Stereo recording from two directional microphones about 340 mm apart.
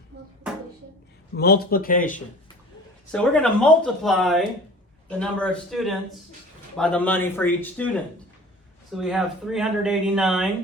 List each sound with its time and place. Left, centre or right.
1.4 s speech: left
3.1 s speech: centre